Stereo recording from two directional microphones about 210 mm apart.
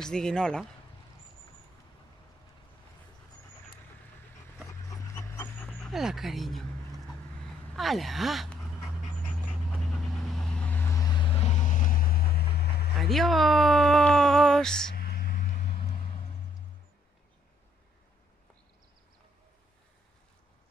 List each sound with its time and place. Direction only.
0.0 s speech: 5° left (ahead or behind)
4.6 s dog: 15° left (ahead or behind)
5.9 s speech: centre (ahead or behind)
7.7 s speech: centre (ahead or behind)
9.7 s vehicle: centre (ahead or behind); by 12.7 s 50° left (ahead or behind)
12.9 s speech: centre (ahead or behind)
15.0 s vehicle: 45° left (ahead or behind)